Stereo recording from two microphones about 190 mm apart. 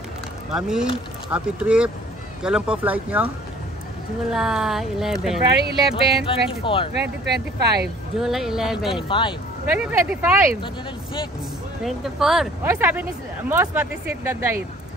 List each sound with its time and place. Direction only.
0.6 s speech: 5° right (ahead or behind)
4.3 s speech: centre (ahead or behind)
5.6 s speech: 60° right (ahead or behind)
6.2 s speech: 30° left (ahead or behind)
7.0 s speech: 60° right (ahead or behind)
8.2 s speech: centre (ahead or behind)
11.8 s speech: centre (ahead or behind)